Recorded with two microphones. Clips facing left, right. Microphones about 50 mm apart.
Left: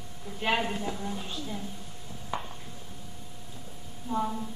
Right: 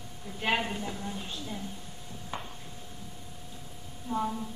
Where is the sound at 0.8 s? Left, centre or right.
Centre.